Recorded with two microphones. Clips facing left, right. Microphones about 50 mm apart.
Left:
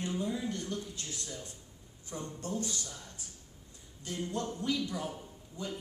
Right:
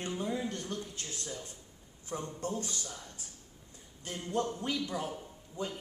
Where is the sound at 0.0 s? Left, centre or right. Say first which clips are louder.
Even; right.